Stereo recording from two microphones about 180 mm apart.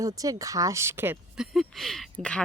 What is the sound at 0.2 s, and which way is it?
Speech, 20° right (ahead or behind).